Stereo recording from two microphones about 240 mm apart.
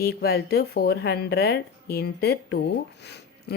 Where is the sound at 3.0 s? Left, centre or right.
Left.